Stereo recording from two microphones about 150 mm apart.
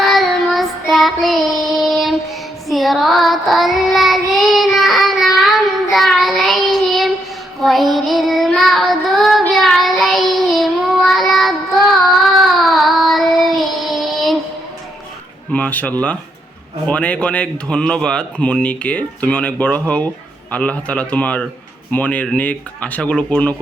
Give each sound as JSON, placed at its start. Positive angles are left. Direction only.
{"t": 0.0, "sound": "child singing", "side_deg": 0}
{"t": 15.5, "sound": "speech", "side_deg": 10}